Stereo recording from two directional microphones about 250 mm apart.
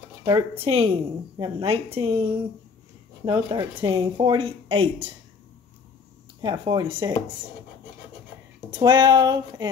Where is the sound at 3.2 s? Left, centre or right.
Centre.